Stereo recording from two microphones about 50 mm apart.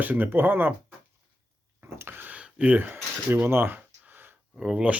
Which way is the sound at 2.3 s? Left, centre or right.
Right.